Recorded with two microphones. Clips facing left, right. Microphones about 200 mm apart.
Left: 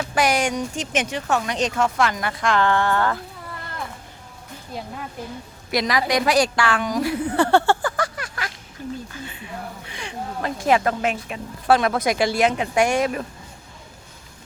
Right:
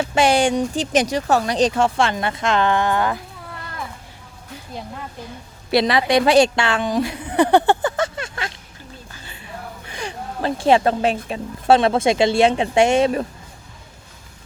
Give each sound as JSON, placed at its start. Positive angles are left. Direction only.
{"t": 0.0, "sound": "speech", "side_deg": -30}
{"t": 5.7, "sound": "a woman's voice", "side_deg": -30}
{"t": 9.1, "sound": "a sound", "side_deg": -35}
{"t": 11.3, "sound": "speech", "side_deg": -25}